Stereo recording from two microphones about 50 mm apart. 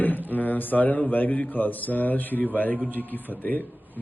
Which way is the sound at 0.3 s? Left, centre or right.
Left.